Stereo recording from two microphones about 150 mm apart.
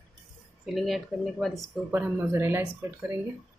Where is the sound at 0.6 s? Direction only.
Centre (ahead or behind).